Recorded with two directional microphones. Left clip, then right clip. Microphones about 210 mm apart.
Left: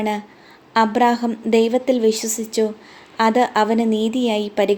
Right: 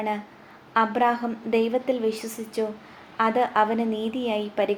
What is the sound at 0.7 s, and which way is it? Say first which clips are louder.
A woman's voice: left 5 dB; 55° left (ahead or behind).